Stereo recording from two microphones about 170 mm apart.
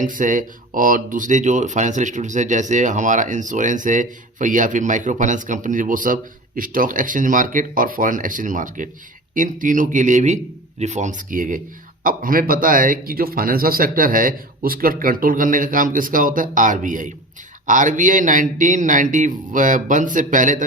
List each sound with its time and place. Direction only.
0.0 s speech: 50° right (ahead or behind)